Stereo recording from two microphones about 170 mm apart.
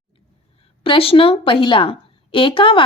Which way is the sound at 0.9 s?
35° left (ahead or behind).